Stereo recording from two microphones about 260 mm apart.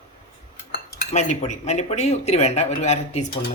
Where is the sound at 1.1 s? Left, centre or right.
Left.